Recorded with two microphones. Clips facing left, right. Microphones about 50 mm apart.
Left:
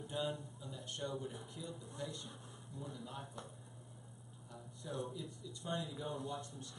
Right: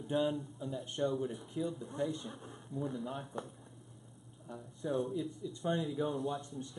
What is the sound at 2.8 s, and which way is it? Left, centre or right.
Speech, right.